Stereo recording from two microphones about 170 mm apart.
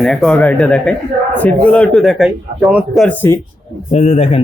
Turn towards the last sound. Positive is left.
turn(degrees=40)  # may be behind; listen again after turning